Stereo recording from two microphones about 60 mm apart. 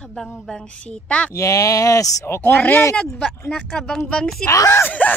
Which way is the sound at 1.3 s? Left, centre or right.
Left.